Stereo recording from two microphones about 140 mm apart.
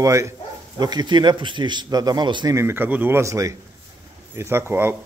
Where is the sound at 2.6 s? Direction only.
15° right (ahead or behind).